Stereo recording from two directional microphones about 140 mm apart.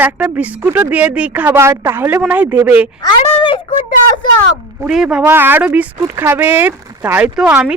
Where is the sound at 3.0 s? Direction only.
35° left (ahead or behind).